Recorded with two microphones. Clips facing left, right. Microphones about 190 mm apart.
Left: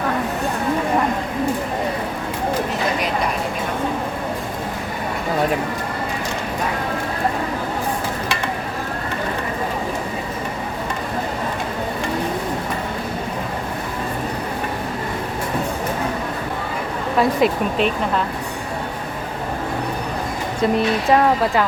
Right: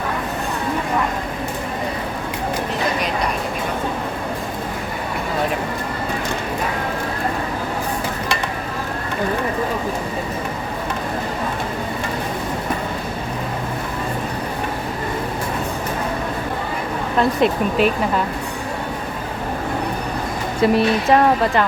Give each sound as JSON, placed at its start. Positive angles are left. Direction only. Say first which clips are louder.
{"t": 17.2, "sound": "speech", "louder": "even", "side_deg": 0}
{"t": 20.6, "sound": "speech", "louder": "right 2 dB", "side_deg": 0}